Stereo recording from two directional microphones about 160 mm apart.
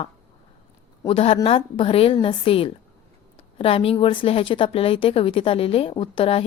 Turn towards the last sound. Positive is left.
turn(degrees=35)  # may be behind; listen again after turning